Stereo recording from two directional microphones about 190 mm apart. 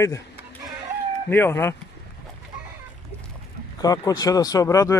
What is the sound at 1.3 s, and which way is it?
Speech, 10° left (ahead or behind).